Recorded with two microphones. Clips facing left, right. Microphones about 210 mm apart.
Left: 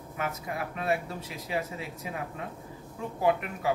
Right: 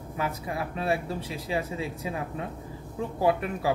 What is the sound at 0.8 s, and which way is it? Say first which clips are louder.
Speech: right 2 dB; 30° right (ahead or behind).